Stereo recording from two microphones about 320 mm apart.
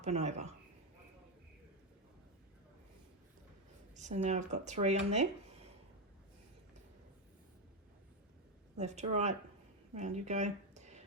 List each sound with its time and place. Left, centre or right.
0.0 s speech: right
3.9 s speech: right
8.8 s speech: right